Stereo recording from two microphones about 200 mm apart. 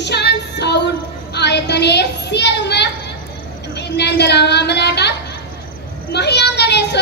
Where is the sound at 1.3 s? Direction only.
55° left (ahead or behind).